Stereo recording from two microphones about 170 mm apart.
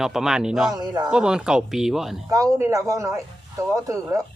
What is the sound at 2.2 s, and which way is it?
Speech, 20° right (ahead or behind).